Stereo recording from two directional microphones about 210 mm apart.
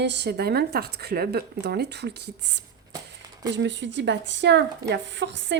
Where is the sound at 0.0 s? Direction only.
55° right (ahead or behind).